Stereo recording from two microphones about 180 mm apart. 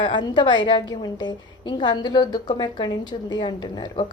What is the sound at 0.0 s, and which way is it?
A woman's voice, 25° left (ahead or behind).